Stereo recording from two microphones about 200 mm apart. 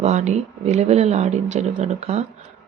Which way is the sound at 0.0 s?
35° right (ahead or behind).